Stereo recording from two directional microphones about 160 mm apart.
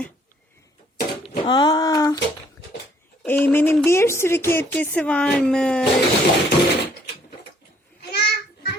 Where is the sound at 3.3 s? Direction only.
15° left (ahead or behind).